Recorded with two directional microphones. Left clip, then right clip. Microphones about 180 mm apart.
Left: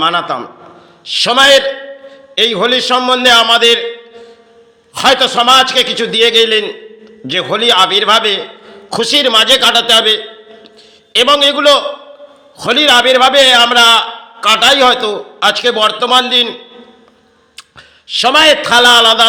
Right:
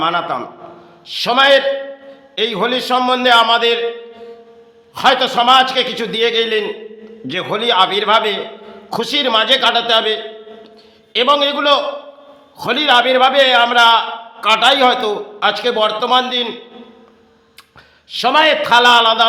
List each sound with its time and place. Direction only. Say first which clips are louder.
0.0 s a man's voice: left 4 dB; 15° left (ahead or behind)
3.4 s a sound: left 5 dB; 15° left (ahead or behind)
4.9 s a man's voice: left 3 dB; 15° left (ahead or behind)
18.1 s a man's voice: left 4 dB; 15° left (ahead or behind)